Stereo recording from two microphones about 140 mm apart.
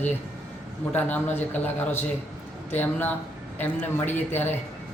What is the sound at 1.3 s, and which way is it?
Speech, 15° left (ahead or behind).